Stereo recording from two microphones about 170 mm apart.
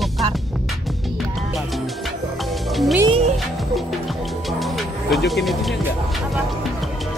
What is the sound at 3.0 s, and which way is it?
Music, 35° right (ahead or behind).